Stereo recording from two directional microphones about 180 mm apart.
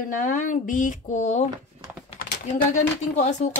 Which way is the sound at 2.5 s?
40° left (ahead or behind).